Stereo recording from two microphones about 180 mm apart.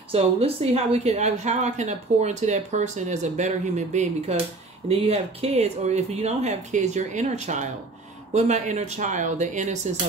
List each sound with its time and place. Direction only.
0.1 s speech: 35° right (ahead or behind)